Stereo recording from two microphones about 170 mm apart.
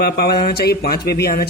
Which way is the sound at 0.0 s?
70° left (ahead or behind).